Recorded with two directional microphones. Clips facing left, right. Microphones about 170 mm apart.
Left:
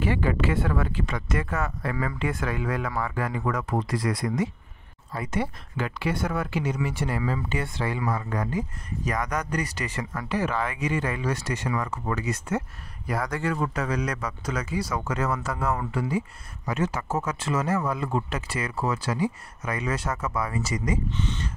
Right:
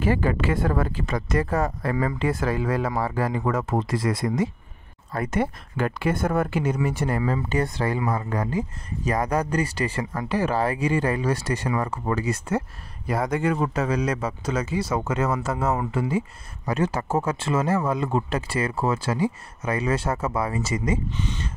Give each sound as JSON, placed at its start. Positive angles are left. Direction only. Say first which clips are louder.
{"t": 0.0, "sound": "speech", "louder": "right 2 dB", "side_deg": -40}
{"t": 5.1, "sound": "speech", "louder": "right 4 dB", "side_deg": -55}
{"t": 21.1, "sound": "speech", "louder": "even", "side_deg": -10}